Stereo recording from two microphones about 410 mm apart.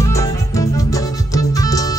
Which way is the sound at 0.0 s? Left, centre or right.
Centre.